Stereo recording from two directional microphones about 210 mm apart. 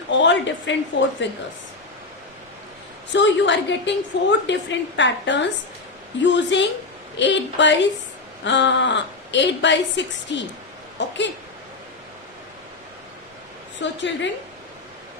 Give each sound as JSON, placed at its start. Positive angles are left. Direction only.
{"t": 0.1, "sound": "a woman's voice", "side_deg": 60}
{"t": 3.1, "sound": "a woman's voice", "side_deg": 60}
{"t": 13.7, "sound": "a woman's voice", "side_deg": 60}